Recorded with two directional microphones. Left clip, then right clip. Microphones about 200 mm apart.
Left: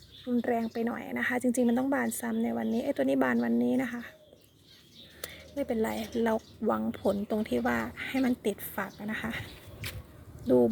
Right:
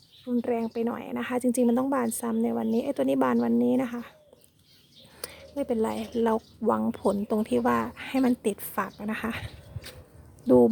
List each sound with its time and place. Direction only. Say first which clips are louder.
0.3 s speech: right 2 dB; 15° right (ahead or behind)
5.2 s a woman's voice: right 2 dB; 30° right (ahead or behind)
10.4 s speech: right 5 dB; 35° right (ahead or behind)